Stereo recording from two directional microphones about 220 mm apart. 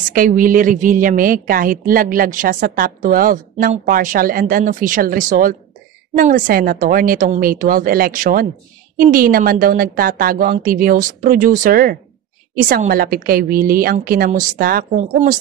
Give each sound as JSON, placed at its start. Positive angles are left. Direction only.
{"t": 0.1, "sound": "a woman's voice", "side_deg": -40}